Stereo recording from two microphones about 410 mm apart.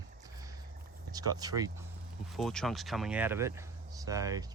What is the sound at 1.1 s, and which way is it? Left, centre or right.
Speech, centre.